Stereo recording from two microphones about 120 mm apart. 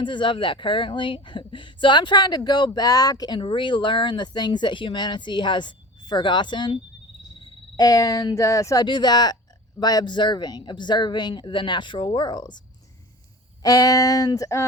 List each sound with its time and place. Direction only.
0.0 s speech: 40° left (ahead or behind)
7.8 s speech: 30° left (ahead or behind)